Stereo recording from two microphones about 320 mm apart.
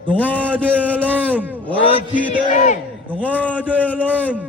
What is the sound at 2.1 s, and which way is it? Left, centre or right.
A man's voice, left.